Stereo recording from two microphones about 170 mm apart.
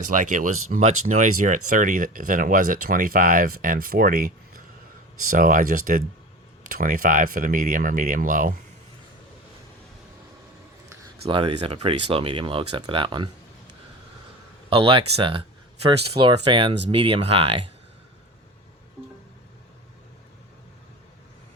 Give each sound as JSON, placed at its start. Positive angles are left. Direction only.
{"t": 0.0, "sound": "speech", "side_deg": -50}
{"t": 5.3, "sound": "speech", "side_deg": -55}
{"t": 11.3, "sound": "speech", "side_deg": -30}
{"t": 14.7, "sound": "speech", "side_deg": -30}